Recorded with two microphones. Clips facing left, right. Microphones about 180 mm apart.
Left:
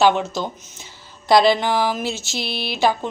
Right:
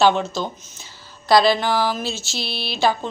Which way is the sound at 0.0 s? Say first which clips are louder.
Even; 15° left (ahead or behind).